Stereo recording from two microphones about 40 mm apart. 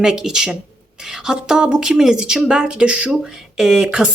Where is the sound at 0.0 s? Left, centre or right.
Centre.